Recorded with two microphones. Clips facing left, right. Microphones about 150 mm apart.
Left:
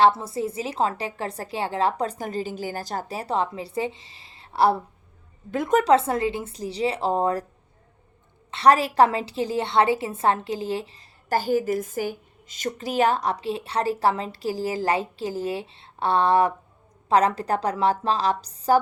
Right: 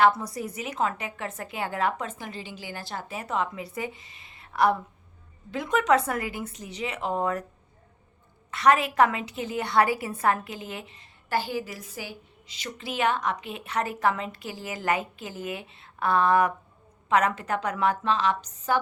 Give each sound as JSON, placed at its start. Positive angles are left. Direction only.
{"t": 0.0, "sound": "a woman's voice", "side_deg": 30}
{"t": 5.5, "sound": "a woman's voice", "side_deg": 50}
{"t": 5.9, "sound": "a woman's voice", "side_deg": 25}
{"t": 8.4, "sound": "a woman's voice", "side_deg": 30}